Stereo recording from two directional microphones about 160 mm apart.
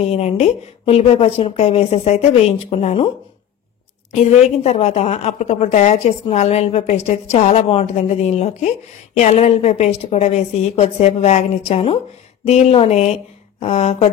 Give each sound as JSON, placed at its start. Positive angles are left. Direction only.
{"t": 0.0, "sound": "speech", "side_deg": 40}
{"t": 4.1, "sound": "a woman's voice", "side_deg": 45}